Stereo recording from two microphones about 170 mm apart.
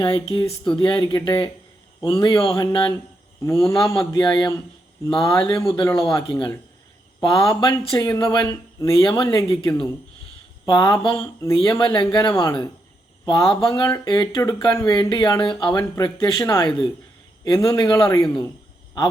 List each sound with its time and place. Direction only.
0.0 s speech: 30° left (ahead or behind)
3.4 s speech: 15° left (ahead or behind)
3.8 s speech: 30° left (ahead or behind)